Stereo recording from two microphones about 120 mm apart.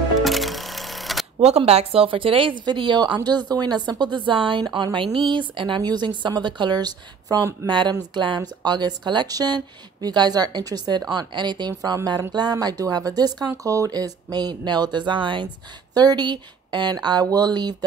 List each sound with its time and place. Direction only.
0.2 s music: centre (ahead or behind)
1.4 s speech: 60° right (ahead or behind); by 17.7 s 35° right (ahead or behind)